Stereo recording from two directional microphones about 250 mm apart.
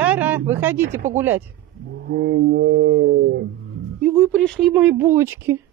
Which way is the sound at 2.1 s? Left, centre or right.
Right.